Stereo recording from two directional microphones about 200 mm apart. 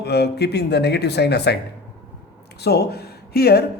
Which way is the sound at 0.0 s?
55° left (ahead or behind).